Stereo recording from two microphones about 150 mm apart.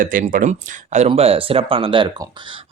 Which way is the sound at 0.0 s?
65° right (ahead or behind).